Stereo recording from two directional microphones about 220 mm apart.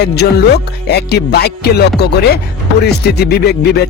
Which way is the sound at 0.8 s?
50° left (ahead or behind).